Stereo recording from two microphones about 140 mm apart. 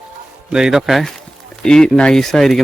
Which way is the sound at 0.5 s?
5° right (ahead or behind).